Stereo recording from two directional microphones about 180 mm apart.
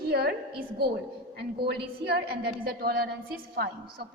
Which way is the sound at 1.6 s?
65° right (ahead or behind).